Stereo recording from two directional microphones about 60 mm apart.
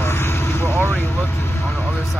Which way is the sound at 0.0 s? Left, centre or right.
Left.